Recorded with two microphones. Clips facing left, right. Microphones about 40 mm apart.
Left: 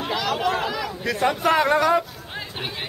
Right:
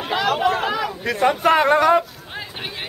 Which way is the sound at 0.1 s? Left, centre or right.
Right.